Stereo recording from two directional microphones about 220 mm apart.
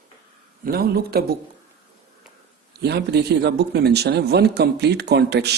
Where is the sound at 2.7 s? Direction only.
50° right (ahead or behind).